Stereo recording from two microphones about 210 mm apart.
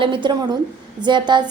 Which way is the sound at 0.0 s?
25° right (ahead or behind).